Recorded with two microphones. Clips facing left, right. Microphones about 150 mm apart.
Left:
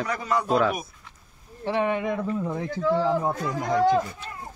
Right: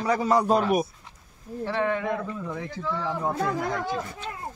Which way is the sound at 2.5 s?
30° left (ahead or behind).